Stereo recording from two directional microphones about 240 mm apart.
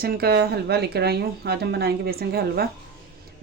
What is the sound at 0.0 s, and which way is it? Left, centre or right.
Speech, right.